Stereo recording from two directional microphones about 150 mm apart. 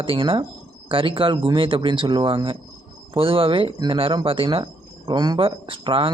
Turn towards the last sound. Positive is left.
turn(degrees=-35)  # may be behind; listen again after turning